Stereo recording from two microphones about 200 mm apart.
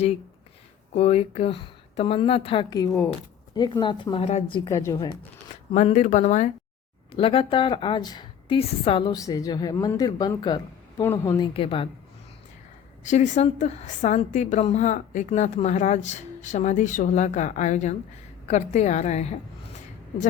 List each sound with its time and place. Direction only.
0.9 s a woman's voice: 30° left (ahead or behind)
2.9 s a woman's voice: 5° left (ahead or behind)
3.5 s a woman's voice: 20° left (ahead or behind)
5.7 s a woman's voice: 35° left (ahead or behind)
7.1 s a woman's voice: 25° left (ahead or behind)
11.0 s a woman's voice: 10° left (ahead or behind)
11.5 s a woman's voice: 25° left (ahead or behind)
13.1 s a woman's voice: 35° left (ahead or behind)